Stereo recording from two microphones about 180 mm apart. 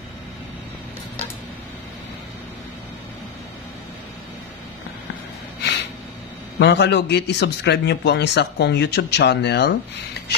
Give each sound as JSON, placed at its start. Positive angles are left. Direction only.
{"t": 6.6, "sound": "a man's voice", "side_deg": 70}